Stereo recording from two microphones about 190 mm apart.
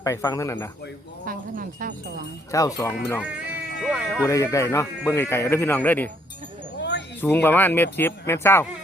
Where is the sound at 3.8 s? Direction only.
Centre (ahead or behind).